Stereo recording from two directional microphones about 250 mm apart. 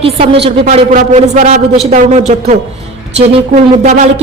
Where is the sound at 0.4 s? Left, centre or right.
Right.